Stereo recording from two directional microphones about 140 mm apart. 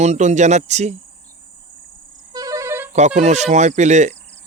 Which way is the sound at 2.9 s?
55° right (ahead or behind).